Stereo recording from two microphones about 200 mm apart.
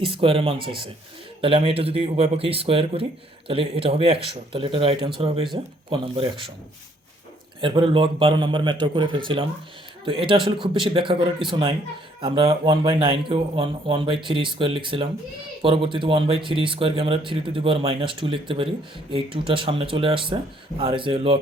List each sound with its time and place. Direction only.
0.0 s speech: 25° right (ahead or behind)
7.6 s speech: 25° right (ahead or behind)